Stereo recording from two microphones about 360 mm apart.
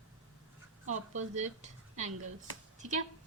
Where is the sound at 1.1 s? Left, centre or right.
Centre.